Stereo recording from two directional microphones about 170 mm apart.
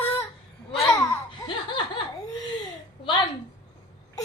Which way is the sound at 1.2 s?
30° left (ahead or behind).